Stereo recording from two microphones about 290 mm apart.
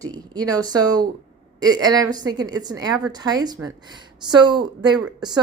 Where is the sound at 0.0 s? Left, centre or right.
Centre.